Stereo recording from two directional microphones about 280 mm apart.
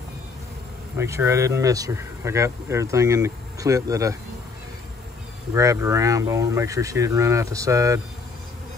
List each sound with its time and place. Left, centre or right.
0.9 s speech: centre
5.5 s speech: centre